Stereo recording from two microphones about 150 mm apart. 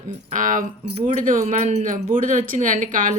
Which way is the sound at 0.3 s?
60° right (ahead or behind).